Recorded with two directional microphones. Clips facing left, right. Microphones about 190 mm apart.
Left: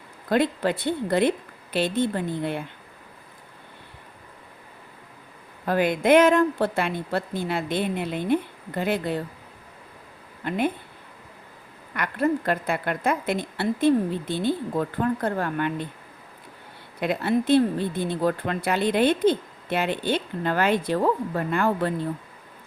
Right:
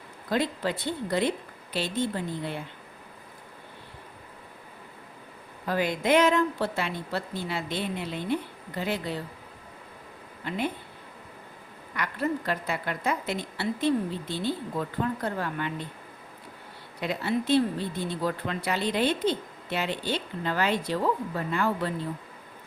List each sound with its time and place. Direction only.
0.3 s speech: 55° left (ahead or behind)
5.6 s speech: 55° left (ahead or behind)
10.4 s speech: 55° left (ahead or behind)
11.9 s speech: 55° left (ahead or behind)
17.0 s speech: 55° left (ahead or behind)